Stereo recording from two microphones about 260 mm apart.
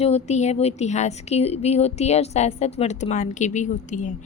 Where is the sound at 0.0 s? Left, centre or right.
Left.